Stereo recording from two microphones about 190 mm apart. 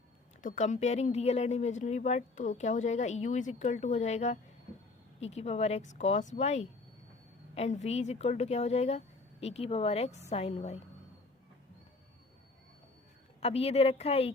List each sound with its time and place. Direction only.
0.4 s speech: 40° left (ahead or behind)
13.4 s speech: 30° left (ahead or behind)